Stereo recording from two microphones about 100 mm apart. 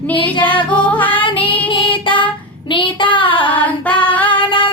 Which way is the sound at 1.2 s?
60° left (ahead or behind).